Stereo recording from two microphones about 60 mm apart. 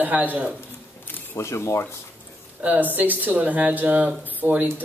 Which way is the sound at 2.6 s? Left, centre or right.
Right.